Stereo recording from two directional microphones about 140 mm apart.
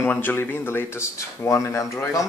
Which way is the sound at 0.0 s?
15° left (ahead or behind).